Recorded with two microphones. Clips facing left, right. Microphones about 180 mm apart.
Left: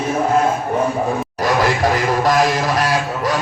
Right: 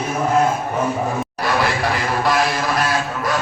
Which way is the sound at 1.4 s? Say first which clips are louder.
Left 4 dB; 45° left (ahead or behind).